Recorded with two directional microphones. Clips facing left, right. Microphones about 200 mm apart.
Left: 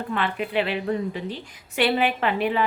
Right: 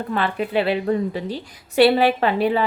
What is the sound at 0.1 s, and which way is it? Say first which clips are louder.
A woman's voice: right 4 dB; 35° right (ahead or behind).